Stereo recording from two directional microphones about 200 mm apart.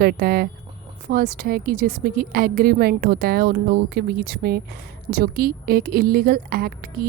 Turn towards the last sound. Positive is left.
turn(degrees=-50)  # may be behind; listen again after turning